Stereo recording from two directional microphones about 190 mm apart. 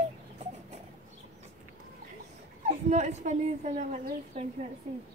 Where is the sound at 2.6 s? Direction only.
35° right (ahead or behind).